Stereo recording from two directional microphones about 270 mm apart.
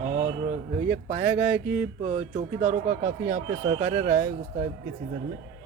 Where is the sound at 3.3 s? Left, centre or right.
Right.